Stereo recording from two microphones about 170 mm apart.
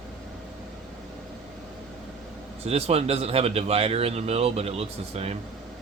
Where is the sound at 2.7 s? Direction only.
40° right (ahead or behind).